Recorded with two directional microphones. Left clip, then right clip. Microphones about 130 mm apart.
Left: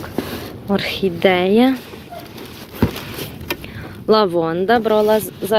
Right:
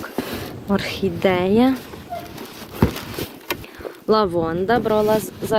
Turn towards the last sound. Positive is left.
turn(degrees=0)  # may be behind; listen again after turning